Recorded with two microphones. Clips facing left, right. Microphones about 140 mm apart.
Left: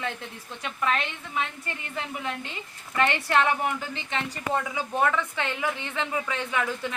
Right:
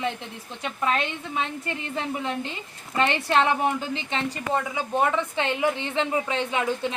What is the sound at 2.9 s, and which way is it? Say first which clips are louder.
A woman's voice: right 2 dB; 20° right (ahead or behind).